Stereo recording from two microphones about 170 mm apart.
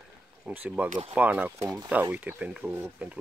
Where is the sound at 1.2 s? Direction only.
10° right (ahead or behind).